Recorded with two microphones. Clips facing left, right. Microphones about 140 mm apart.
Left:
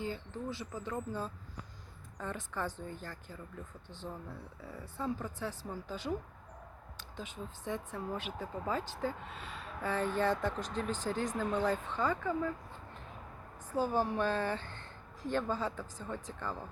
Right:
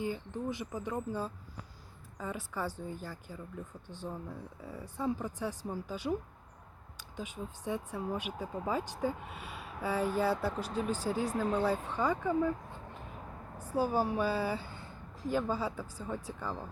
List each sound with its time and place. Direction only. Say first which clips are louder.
0.0 s speech: right 3 dB; 15° right (ahead or behind)
7.2 s speech: right 3 dB; 10° right (ahead or behind)
13.6 s a woman's voice: right 1 dB; 10° right (ahead or behind)